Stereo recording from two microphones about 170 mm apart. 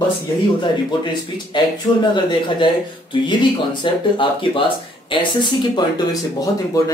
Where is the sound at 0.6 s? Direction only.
25° left (ahead or behind).